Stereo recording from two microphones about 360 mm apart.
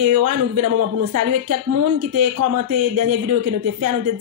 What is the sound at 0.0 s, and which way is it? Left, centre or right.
A man's voice, right.